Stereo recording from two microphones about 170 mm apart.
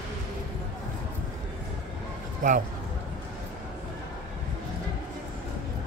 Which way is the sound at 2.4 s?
55° right (ahead or behind).